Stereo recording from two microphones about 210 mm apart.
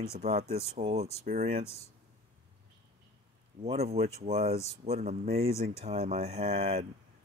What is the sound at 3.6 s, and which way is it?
Speech, 30° right (ahead or behind).